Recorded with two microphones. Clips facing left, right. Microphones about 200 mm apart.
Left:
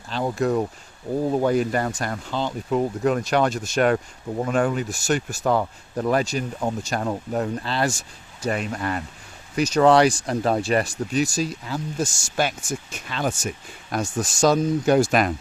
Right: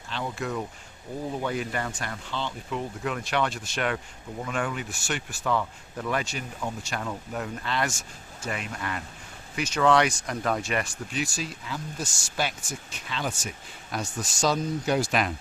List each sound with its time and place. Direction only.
0.1 s speech: 40° left (ahead or behind)